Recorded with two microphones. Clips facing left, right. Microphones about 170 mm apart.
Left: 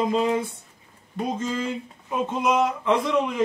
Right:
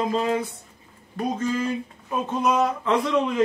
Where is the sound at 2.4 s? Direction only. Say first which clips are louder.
Right 1 dB; 10° left (ahead or behind).